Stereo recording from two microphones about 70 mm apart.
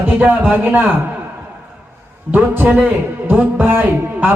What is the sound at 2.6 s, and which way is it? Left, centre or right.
Speech, centre.